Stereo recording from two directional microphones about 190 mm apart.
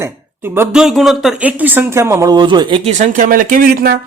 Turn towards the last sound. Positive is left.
turn(degrees=-55)  # may be behind; listen again after turning